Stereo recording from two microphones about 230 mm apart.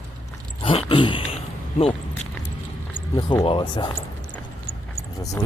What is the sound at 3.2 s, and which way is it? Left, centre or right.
Speech, centre.